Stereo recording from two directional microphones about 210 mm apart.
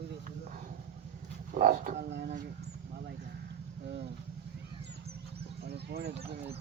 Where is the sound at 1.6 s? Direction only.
40° right (ahead or behind).